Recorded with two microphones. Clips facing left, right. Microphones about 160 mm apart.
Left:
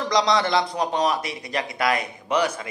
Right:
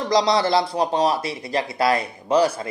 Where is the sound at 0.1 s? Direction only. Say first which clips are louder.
Right 3 dB; 30° right (ahead or behind).